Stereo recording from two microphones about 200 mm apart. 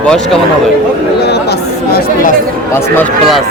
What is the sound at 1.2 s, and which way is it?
Speech, 55° left (ahead or behind).